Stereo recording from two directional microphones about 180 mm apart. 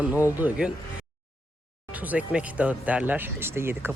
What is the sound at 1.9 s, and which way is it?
Speech, 10° right (ahead or behind).